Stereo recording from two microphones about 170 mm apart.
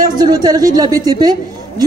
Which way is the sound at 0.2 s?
20° right (ahead or behind).